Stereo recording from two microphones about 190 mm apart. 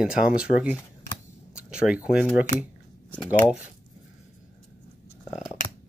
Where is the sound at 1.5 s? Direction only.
5° right (ahead or behind).